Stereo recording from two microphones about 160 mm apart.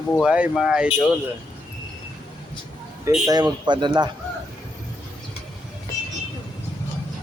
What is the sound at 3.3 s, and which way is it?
Speech, 25° right (ahead or behind).